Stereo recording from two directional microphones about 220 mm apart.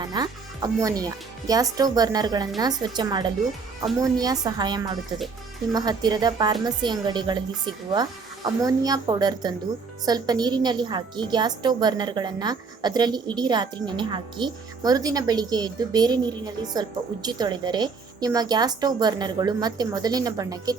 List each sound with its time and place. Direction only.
0.0 s a woman's voice: 20° right (ahead or behind)